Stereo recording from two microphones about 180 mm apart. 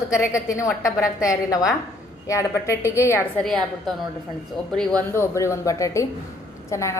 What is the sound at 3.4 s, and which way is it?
Speech, centre (ahead or behind).